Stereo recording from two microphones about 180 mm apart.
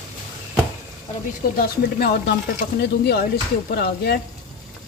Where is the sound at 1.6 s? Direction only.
60° left (ahead or behind).